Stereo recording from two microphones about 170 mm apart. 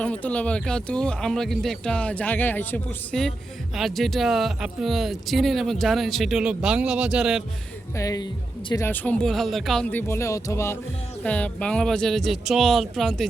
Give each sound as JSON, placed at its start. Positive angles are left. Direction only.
{"t": 0.0, "sound": "speech", "side_deg": 10}
{"t": 7.9, "sound": "speech", "side_deg": 20}